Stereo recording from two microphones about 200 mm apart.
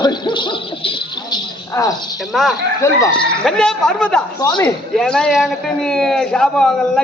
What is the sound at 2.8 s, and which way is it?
Speech, 15° left (ahead or behind).